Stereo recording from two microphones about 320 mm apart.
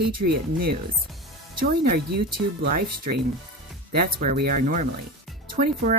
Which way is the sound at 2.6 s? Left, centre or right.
Right.